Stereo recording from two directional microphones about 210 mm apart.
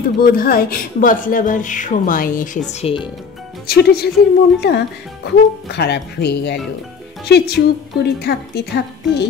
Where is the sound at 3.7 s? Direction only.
50° left (ahead or behind).